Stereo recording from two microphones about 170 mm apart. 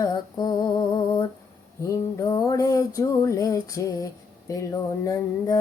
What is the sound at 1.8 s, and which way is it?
Music, 20° left (ahead or behind).